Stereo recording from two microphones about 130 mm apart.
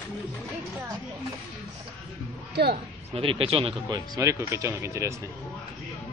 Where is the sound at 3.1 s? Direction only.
45° right (ahead or behind); by 5.1 s 20° right (ahead or behind).